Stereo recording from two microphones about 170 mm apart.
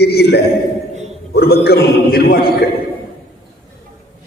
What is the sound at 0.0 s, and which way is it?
A man's voice, 70° left (ahead or behind).